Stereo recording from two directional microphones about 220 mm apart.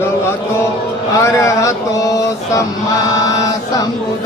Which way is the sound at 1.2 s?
15° left (ahead or behind).